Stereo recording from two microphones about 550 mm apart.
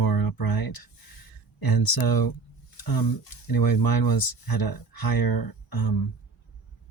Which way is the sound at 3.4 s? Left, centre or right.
Left.